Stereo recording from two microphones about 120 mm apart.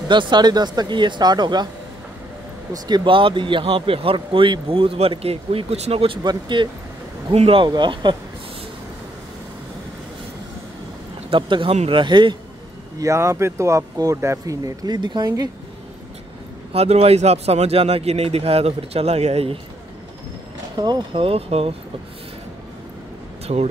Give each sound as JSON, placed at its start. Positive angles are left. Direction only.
{"t": 0.1, "sound": "speech", "side_deg": -40}
{"t": 2.7, "sound": "speech", "side_deg": -35}
{"t": 6.2, "sound": "speech", "side_deg": -40}
{"t": 11.2, "sound": "speech", "side_deg": -45}
{"t": 11.7, "sound": "speech", "side_deg": -60}
{"t": 12.0, "sound": "speech", "side_deg": -40}
{"t": 13.0, "sound": "speech", "side_deg": -25}
{"t": 16.7, "sound": "speech", "side_deg": -60}
{"t": 20.7, "sound": "speech", "side_deg": -35}
{"t": 21.1, "sound": "speech", "side_deg": -50}
{"t": 23.4, "sound": "speech", "side_deg": -60}